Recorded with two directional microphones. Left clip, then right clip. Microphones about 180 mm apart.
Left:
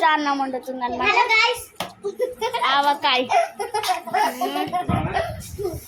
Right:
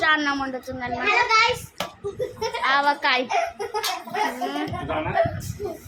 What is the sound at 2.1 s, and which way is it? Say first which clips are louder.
Speech: left 4 dB; 25° left (ahead or behind).